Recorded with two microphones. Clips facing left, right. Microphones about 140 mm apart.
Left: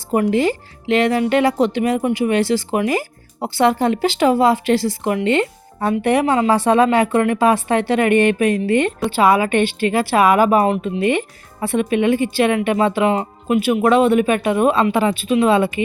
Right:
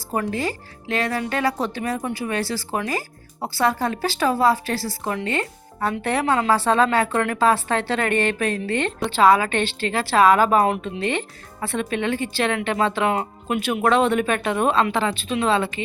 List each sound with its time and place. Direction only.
0.1 s speech: 20° left (ahead or behind)